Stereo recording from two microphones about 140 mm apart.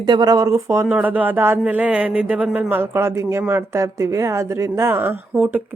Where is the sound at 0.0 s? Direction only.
30° right (ahead or behind).